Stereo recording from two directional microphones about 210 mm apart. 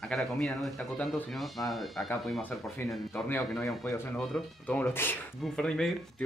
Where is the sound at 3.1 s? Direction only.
10° left (ahead or behind).